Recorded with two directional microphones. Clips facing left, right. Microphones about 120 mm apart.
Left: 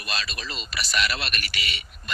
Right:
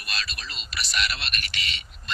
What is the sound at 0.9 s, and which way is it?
Speech, 45° left (ahead or behind).